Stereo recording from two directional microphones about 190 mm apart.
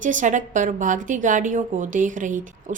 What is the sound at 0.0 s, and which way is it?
Speech, 40° right (ahead or behind).